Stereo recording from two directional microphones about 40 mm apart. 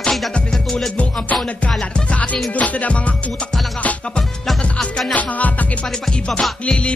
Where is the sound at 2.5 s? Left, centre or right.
Left.